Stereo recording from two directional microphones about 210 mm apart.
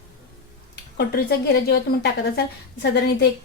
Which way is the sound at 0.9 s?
45° left (ahead or behind).